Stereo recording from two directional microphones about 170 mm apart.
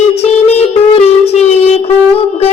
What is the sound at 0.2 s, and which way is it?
Music, 40° left (ahead or behind).